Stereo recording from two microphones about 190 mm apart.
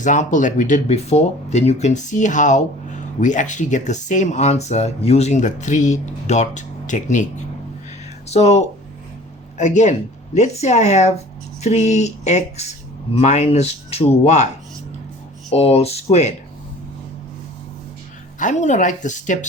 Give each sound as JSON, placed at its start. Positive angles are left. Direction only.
{"t": 0.0, "sound": "speech", "side_deg": 40}
{"t": 8.3, "sound": "speech", "side_deg": 35}
{"t": 15.5, "sound": "speech", "side_deg": 35}
{"t": 18.3, "sound": "speech", "side_deg": 40}